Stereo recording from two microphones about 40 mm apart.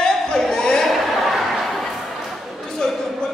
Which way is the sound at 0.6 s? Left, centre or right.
Centre.